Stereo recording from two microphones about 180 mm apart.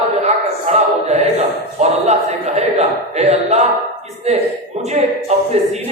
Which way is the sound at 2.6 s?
35° right (ahead or behind).